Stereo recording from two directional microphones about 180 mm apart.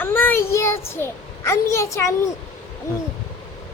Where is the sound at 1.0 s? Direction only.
15° left (ahead or behind).